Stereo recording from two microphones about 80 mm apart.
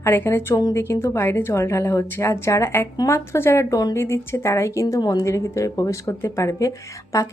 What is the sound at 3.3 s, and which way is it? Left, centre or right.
Speech, left.